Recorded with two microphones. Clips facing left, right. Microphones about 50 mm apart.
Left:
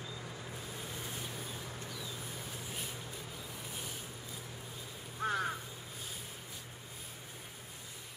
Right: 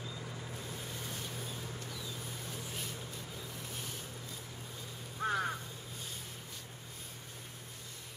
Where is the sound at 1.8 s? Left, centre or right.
Centre.